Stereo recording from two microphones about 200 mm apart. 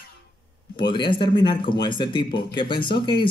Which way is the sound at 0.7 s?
25° left (ahead or behind).